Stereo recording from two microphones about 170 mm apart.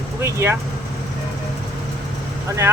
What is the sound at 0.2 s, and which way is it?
Speech, 15° right (ahead or behind).